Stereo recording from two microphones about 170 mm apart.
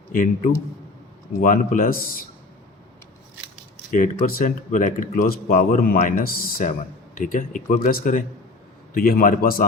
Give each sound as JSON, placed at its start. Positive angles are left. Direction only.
{"t": 0.1, "sound": "a man's voice", "side_deg": 50}
{"t": 3.9, "sound": "a man's voice", "side_deg": 50}